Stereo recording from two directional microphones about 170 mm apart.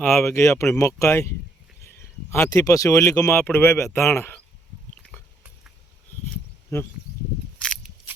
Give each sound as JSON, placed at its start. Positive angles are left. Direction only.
{"t": 0.0, "sound": "speech", "side_deg": 15}
{"t": 6.3, "sound": "insect", "side_deg": 15}